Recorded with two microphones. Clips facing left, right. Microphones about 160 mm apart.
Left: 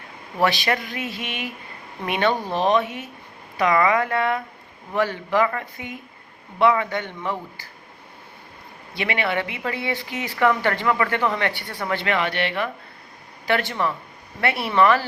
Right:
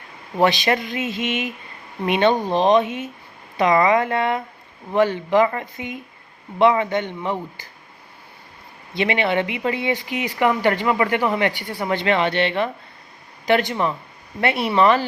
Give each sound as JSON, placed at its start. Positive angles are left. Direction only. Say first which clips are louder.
{"t": 0.3, "sound": "speech", "louder": "right 3 dB", "side_deg": -20}
{"t": 9.0, "sound": "speech", "louder": "right 4 dB", "side_deg": -20}